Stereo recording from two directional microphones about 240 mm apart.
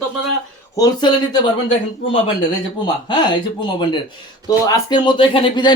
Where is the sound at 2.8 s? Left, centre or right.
Centre.